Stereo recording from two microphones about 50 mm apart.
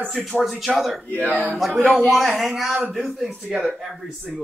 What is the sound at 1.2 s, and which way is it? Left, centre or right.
Speech, left.